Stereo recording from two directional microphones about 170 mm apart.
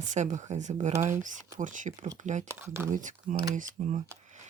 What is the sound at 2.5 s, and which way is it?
Speech, 15° right (ahead or behind).